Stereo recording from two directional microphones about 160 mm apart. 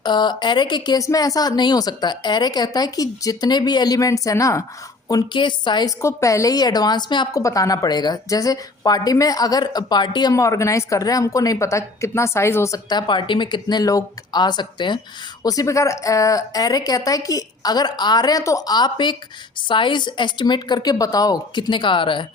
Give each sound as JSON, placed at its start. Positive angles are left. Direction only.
{"t": 0.0, "sound": "a woman's voice", "side_deg": 30}